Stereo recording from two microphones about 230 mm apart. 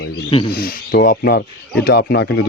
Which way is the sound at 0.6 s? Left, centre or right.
Left.